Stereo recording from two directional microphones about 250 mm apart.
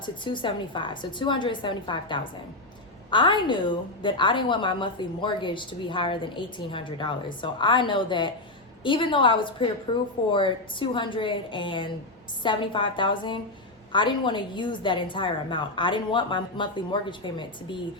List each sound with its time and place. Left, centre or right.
0.0 s a woman's voice: centre